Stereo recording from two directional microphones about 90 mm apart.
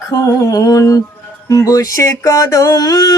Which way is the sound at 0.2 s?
35° left (ahead or behind).